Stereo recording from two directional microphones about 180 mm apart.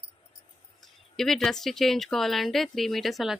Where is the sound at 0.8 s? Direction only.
Centre (ahead or behind).